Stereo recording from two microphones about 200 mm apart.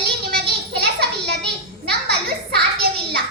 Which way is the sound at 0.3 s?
50° right (ahead or behind).